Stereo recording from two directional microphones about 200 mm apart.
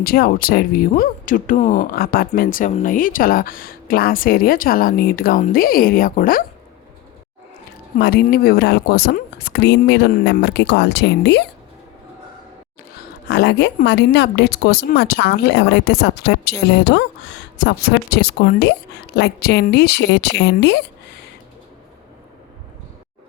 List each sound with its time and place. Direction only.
0.0 s speech: 50° left (ahead or behind)
7.9 s speech: 55° left (ahead or behind)
13.0 s speech: 55° left (ahead or behind)